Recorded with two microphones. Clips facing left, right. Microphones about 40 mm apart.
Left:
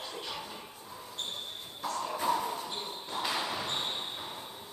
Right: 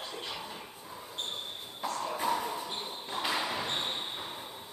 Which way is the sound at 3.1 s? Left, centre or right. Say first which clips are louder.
Right 1 dB; centre.